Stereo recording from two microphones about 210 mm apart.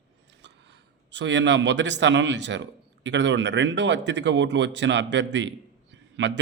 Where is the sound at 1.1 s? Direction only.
60° right (ahead or behind).